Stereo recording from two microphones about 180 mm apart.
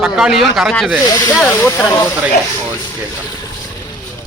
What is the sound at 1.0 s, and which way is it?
Speech, 20° left (ahead or behind).